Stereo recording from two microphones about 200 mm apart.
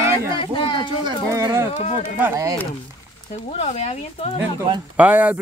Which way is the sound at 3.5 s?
30° left (ahead or behind).